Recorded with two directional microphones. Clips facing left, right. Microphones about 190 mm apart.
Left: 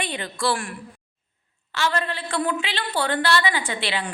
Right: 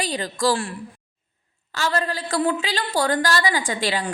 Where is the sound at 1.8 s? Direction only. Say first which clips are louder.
Right 1 dB; 40° right (ahead or behind).